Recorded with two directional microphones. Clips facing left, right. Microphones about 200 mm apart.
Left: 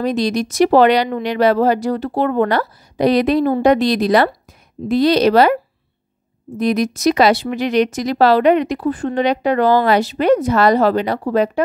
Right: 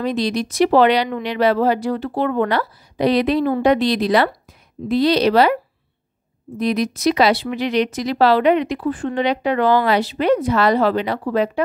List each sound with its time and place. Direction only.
0.0 s speech: 45° left (ahead or behind)
6.6 s speech: 45° left (ahead or behind)